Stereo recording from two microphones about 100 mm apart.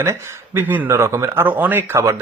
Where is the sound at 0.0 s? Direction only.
25° right (ahead or behind).